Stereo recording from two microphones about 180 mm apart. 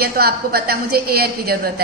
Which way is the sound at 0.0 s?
55° right (ahead or behind).